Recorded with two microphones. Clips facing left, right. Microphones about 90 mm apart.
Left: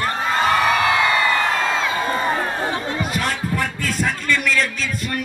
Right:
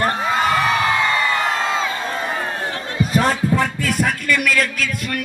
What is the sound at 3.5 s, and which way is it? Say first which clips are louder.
Music: right 4 dB; 20° right (ahead or behind).